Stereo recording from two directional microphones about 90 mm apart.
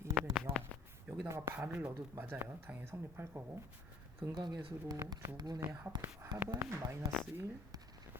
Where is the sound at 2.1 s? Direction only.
25° right (ahead or behind).